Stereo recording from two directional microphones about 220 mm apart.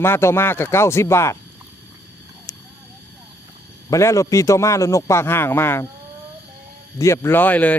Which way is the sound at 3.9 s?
15° left (ahead or behind).